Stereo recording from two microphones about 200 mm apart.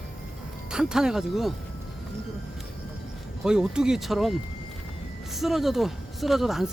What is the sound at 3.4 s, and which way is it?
Speech, 5° right (ahead or behind).